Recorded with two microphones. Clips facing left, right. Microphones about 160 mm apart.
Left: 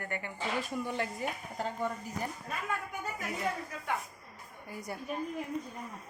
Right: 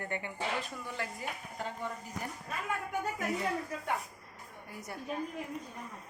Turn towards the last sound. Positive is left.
turn(degrees=0)  # may be behind; listen again after turning